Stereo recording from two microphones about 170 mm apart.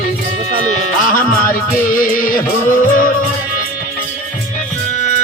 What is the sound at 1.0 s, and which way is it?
Music, 55° left (ahead or behind).